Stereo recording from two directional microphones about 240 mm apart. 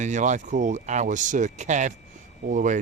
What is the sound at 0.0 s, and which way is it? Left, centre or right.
Speech, right.